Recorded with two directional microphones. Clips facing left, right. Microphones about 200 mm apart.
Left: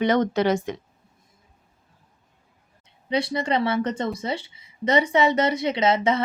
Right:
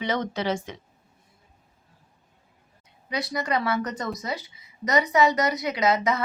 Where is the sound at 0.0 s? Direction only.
60° left (ahead or behind).